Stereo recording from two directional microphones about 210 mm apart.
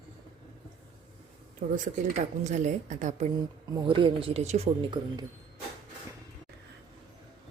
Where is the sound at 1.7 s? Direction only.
35° right (ahead or behind).